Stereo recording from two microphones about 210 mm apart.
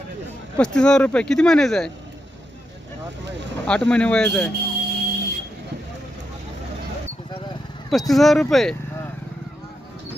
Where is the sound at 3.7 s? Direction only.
5° left (ahead or behind).